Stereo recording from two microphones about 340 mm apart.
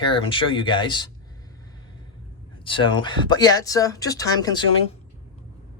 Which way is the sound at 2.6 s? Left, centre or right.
Centre.